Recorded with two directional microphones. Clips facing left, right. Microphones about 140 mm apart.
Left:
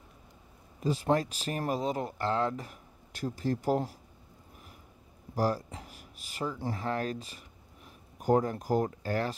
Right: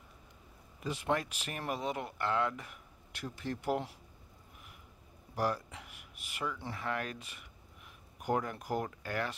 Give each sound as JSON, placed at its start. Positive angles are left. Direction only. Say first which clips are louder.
{"t": 0.7, "sound": "speech", "louder": "left 6 dB", "side_deg": 35}
{"t": 5.3, "sound": "speech", "louder": "left 4 dB", "side_deg": 35}